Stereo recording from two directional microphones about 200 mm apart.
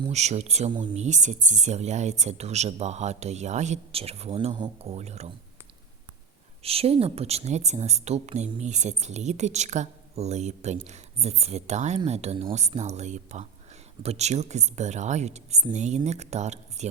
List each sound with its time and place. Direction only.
0.0 s speech: 35° right (ahead or behind)
6.6 s speech: 30° right (ahead or behind)